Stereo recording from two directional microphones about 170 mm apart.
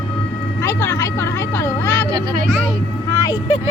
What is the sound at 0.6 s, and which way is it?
Vehicle, 15° left (ahead or behind).